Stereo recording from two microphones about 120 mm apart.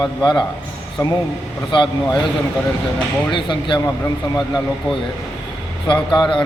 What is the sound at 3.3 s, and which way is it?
Speech, 45° left (ahead or behind).